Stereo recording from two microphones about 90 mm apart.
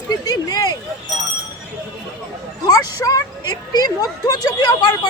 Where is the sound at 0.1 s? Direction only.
45° left (ahead or behind).